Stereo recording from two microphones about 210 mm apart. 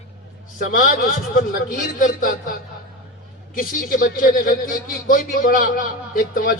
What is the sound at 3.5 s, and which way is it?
A man's voice, 40° left (ahead or behind).